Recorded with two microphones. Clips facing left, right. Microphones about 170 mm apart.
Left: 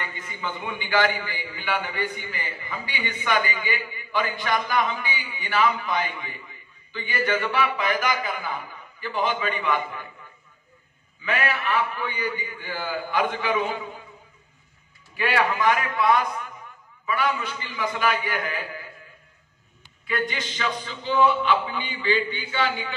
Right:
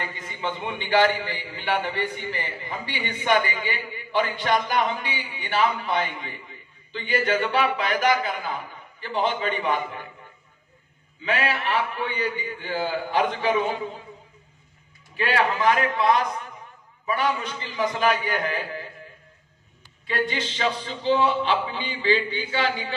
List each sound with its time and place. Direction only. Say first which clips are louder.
0.0 s a man's voice: right 3 dB; 30° right (ahead or behind)
11.2 s a man's voice: right 1 dB; 35° right (ahead or behind)
15.1 s a man's voice: even; 30° right (ahead or behind)
20.1 s a man's voice: right 2 dB; 30° right (ahead or behind)